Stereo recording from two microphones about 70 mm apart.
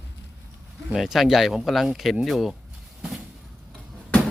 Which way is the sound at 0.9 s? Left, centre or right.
Centre.